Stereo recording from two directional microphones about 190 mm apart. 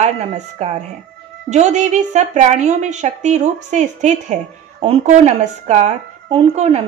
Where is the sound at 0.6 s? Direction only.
35° right (ahead or behind).